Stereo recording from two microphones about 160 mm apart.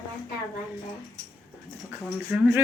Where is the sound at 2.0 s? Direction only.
15° right (ahead or behind).